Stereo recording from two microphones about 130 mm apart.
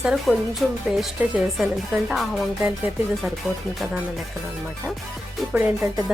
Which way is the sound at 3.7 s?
5° right (ahead or behind).